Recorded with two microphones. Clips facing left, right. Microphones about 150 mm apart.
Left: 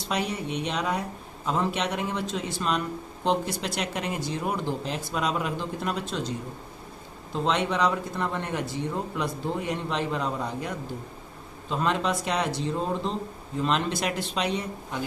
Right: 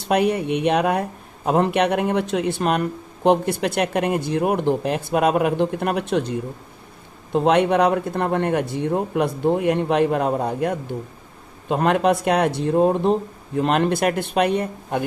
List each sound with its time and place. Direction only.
0.0 s a man's voice: 60° right (ahead or behind)